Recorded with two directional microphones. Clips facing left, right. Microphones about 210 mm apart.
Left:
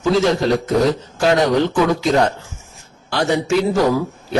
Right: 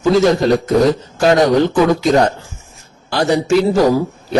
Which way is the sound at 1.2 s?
40° right (ahead or behind).